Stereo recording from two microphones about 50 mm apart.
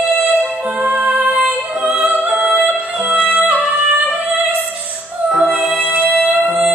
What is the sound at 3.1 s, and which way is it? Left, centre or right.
Music, right.